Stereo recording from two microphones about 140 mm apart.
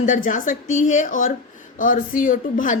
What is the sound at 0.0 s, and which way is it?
A woman's voice, 65° left (ahead or behind).